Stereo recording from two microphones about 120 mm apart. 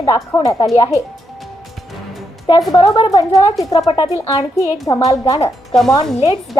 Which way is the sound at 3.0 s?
30° left (ahead or behind).